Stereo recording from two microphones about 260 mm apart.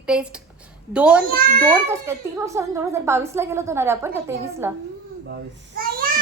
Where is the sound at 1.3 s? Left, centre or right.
Right.